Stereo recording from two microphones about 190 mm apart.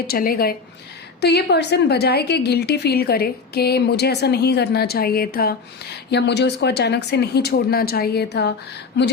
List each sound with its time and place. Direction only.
0.1 s a woman's voice: 50° left (ahead or behind)